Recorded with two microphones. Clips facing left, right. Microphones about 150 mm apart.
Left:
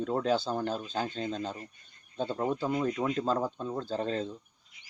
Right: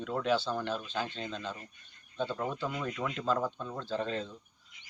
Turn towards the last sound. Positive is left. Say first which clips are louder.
# left 2 dB
turn(degrees=35)  # may be behind; listen again after turning